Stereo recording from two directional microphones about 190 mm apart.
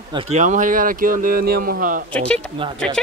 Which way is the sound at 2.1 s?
5° left (ahead or behind).